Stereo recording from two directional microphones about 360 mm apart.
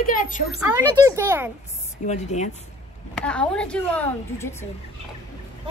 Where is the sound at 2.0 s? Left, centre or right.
Centre.